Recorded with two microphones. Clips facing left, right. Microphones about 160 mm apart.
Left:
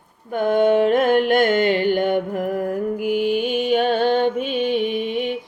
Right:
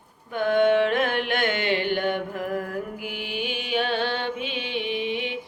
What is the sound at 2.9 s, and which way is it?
Music, 45° left (ahead or behind).